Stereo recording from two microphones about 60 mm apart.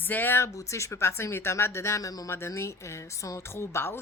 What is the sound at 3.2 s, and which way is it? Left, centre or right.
Speech, left.